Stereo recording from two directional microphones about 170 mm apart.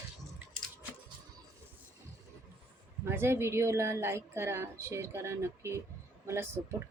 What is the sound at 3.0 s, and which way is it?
A woman's voice, 15° right (ahead or behind).